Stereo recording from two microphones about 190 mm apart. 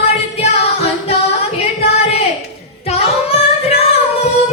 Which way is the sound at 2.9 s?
35° left (ahead or behind).